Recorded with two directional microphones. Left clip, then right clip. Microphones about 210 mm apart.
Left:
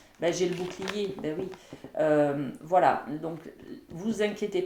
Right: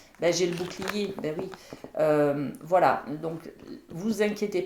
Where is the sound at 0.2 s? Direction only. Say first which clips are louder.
Right 3 dB; 30° right (ahead or behind).